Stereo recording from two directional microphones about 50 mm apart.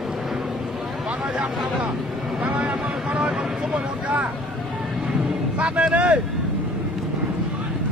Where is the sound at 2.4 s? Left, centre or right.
Right.